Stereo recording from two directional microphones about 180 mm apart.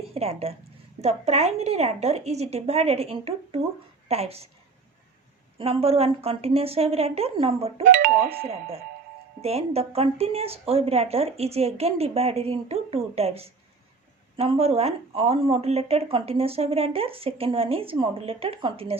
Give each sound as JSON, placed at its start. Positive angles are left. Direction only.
{"t": 0.1, "sound": "speech", "side_deg": -35}
{"t": 5.5, "sound": "speech", "side_deg": -30}
{"t": 7.9, "sound": "speech", "side_deg": -55}
{"t": 9.4, "sound": "speech", "side_deg": -35}